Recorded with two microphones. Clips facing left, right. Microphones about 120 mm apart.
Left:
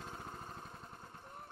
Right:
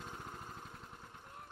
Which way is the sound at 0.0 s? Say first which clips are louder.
Left 1 dB; 5° left (ahead or behind).